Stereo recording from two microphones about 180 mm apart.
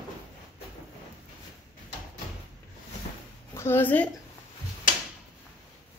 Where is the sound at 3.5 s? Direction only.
15° left (ahead or behind).